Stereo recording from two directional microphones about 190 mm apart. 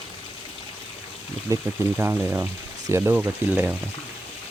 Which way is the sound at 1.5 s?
10° right (ahead or behind).